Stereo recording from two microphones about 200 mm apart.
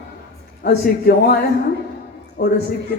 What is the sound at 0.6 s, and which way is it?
Speech, 50° left (ahead or behind).